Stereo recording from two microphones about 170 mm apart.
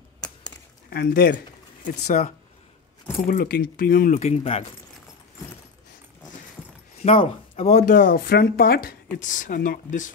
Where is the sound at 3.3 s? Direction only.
60° left (ahead or behind).